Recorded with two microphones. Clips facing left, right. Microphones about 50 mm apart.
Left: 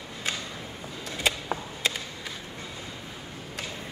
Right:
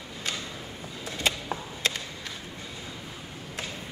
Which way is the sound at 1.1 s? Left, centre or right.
Centre.